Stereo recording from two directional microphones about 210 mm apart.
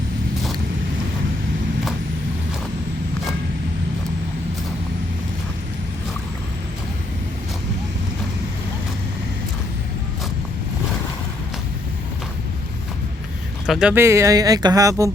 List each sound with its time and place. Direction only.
13.7 s speech: 5° right (ahead or behind)